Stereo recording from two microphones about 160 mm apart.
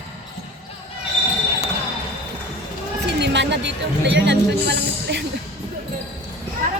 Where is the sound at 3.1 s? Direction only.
90° right.